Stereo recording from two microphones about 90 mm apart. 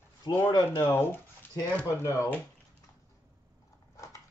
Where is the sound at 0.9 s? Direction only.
25° left (ahead or behind).